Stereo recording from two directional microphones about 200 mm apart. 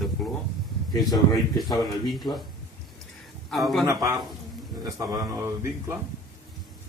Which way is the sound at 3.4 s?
Centre (ahead or behind).